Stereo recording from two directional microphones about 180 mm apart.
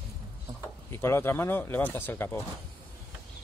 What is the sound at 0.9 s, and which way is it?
Speech, 15° left (ahead or behind).